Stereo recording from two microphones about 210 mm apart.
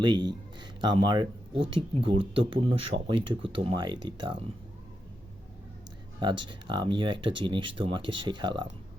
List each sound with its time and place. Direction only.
0.0 s speech: 20° right (ahead or behind)
6.1 s speech: 20° right (ahead or behind)